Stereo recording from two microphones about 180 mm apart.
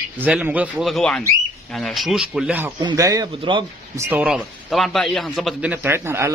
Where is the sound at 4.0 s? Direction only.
10° right (ahead or behind).